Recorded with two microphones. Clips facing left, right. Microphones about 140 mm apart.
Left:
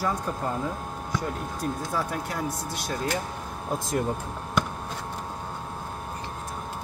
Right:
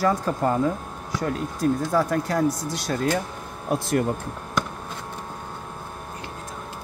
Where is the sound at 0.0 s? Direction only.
80° right.